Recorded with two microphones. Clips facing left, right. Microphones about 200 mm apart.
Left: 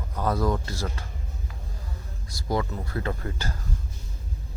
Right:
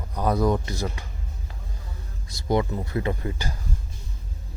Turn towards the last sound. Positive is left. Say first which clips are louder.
# right 3 dB
turn(degrees=-15)  # may be behind; listen again after turning